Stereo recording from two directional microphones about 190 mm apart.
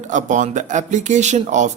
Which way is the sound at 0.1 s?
40° right (ahead or behind).